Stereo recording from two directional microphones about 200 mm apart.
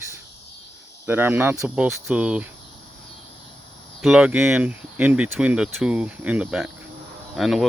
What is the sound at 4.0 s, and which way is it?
Speech, 5° right (ahead or behind).